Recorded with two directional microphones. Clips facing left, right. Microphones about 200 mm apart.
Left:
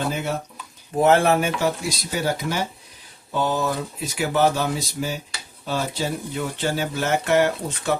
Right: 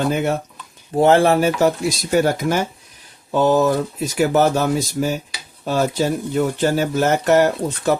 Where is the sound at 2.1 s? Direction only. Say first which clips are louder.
Right 7 dB; 50° right (ahead or behind).